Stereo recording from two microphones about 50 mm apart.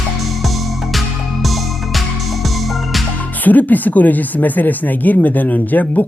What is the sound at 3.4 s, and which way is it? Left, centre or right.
Speech, left.